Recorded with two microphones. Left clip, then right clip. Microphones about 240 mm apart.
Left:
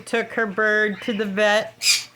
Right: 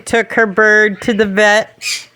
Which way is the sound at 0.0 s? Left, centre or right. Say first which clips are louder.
Right 10 dB; right.